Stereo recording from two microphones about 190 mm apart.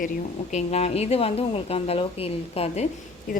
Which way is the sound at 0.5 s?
35° left (ahead or behind).